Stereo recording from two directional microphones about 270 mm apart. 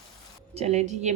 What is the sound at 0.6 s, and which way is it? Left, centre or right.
Speech, right.